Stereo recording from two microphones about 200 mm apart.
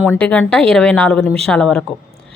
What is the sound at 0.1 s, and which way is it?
A woman's voice, 5° left (ahead or behind).